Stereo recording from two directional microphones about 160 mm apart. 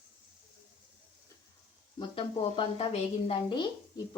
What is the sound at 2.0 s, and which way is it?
A woman's voice, 35° left (ahead or behind).